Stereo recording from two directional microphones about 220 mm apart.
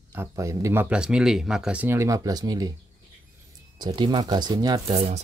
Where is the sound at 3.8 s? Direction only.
20° right (ahead or behind).